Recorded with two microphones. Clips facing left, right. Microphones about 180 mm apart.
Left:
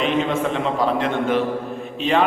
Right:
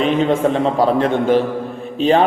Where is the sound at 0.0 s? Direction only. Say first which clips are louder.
Right 5 dB; 35° right (ahead or behind).